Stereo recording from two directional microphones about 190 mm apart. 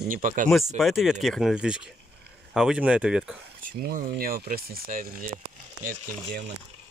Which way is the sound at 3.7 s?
55° right (ahead or behind).